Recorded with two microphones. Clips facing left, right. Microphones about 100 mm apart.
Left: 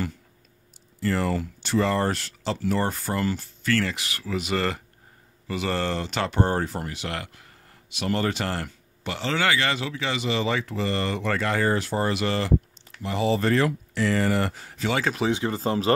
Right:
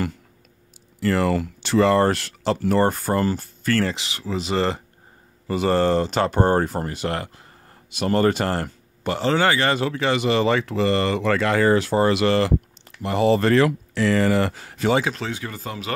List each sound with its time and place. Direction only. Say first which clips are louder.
0.9 s speech: right 5 dB; 75° right (ahead or behind); by 3.9 s 45° right (ahead or behind)
3.9 s speech: right 2 dB; 20° right (ahead or behind)
5.5 s speech: right 8 dB; 40° right (ahead or behind)
7.9 s speech: right 6 dB; 45° right (ahead or behind); by 14.8 s 90° right
15.1 s speech: left 5 dB; 20° left (ahead or behind)